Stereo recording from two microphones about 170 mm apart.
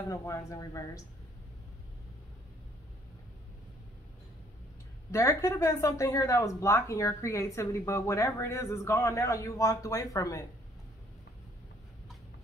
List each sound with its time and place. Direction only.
0.1 s speech: 20° left (ahead or behind)
5.1 s speech: 15° left (ahead or behind)